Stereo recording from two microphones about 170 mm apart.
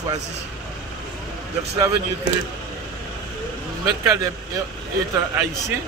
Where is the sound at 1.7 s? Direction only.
20° right (ahead or behind).